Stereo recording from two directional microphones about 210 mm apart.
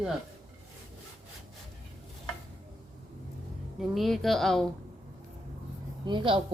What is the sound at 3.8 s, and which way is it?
Speech, centre (ahead or behind).